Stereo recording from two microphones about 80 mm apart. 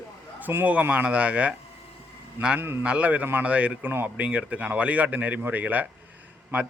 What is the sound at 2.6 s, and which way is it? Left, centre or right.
Speech, right.